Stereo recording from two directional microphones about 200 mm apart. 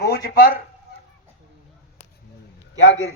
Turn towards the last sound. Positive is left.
turn(degrees=65)  # may be behind; listen again after turning